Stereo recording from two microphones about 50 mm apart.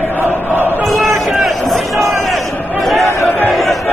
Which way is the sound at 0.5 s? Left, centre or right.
Right.